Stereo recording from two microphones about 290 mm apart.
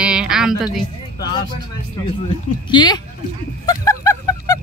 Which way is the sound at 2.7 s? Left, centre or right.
Centre.